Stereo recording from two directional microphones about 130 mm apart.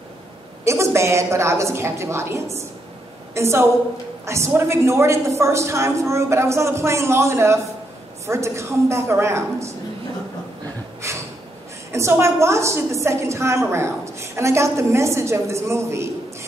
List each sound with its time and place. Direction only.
0.7 s a woman's voice: 20° right (ahead or behind)
11.0 s gasp: 20° right (ahead or behind)
11.9 s a woman's voice: 20° right (ahead or behind)